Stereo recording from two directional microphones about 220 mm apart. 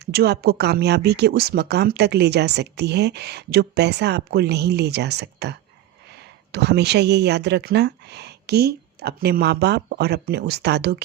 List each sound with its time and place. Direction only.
0.0 s speech: 45° right (ahead or behind)